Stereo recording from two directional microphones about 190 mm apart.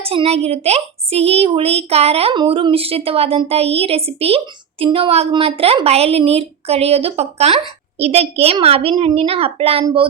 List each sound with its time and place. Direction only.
0.0 s a woman's voice: 30° right (ahead or behind)